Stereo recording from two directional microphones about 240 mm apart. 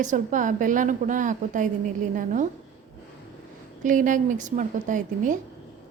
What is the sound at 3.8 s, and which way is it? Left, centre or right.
A woman's voice, right.